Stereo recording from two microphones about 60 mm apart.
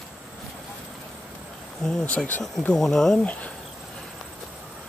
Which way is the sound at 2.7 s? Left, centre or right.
Centre.